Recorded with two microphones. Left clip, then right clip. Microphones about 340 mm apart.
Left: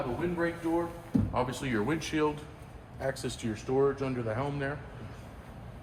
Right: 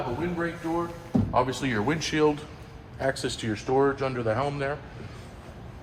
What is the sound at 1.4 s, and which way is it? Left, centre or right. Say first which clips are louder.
A man's voice: right 4 dB; right.